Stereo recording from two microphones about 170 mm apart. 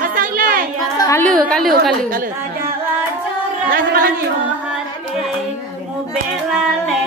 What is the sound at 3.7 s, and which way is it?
Speech, 60° right (ahead or behind).